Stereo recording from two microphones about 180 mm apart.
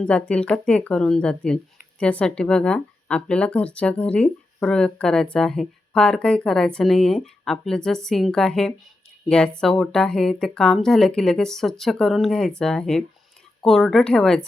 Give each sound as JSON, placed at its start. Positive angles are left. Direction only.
{"t": 0.0, "sound": "speech", "side_deg": 5}